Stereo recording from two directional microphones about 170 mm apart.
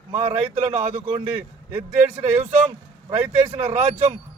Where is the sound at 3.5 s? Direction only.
40° right (ahead or behind).